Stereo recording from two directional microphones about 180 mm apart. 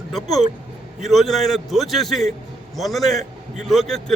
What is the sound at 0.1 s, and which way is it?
A man's voice, centre (ahead or behind).